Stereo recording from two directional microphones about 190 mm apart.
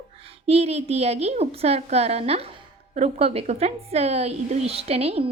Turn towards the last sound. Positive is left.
turn(degrees=-35)  # may be behind; listen again after turning